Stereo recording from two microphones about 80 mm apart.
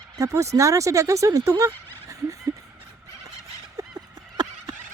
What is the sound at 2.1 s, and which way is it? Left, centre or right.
Fowl, right.